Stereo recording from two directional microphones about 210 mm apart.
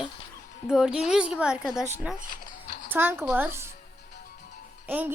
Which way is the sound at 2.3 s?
40° left (ahead or behind).